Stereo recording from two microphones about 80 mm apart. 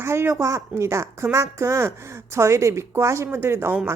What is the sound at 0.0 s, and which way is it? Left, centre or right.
A woman's voice, right.